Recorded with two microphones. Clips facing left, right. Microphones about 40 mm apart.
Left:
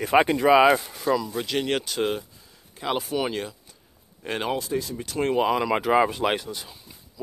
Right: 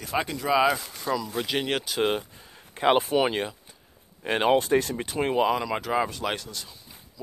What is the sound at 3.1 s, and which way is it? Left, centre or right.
Speech, right.